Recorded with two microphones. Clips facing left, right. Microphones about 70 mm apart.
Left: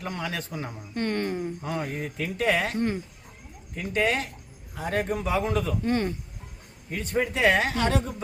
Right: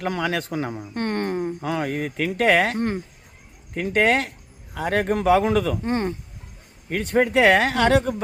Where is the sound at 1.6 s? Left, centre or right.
Right.